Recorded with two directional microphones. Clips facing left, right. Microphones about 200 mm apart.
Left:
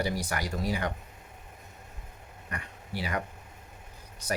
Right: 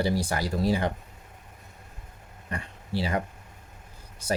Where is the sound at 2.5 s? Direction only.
30° right (ahead or behind).